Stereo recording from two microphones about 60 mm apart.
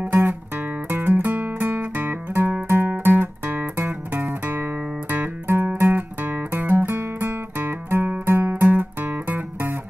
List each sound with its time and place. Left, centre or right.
0.8 s music: right